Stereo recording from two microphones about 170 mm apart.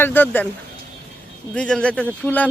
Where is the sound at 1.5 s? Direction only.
5° left (ahead or behind).